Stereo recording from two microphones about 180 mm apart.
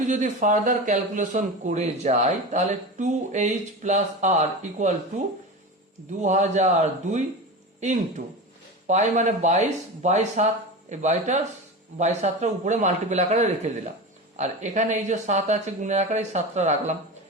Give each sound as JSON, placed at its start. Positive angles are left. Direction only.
{"t": 0.0, "sound": "speech", "side_deg": -45}
{"t": 6.1, "sound": "speech", "side_deg": -40}